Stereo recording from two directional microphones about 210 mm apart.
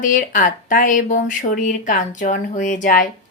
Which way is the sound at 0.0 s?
40° left (ahead or behind).